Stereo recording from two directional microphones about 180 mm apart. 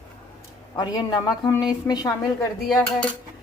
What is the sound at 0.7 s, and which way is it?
A woman's voice, 20° left (ahead or behind).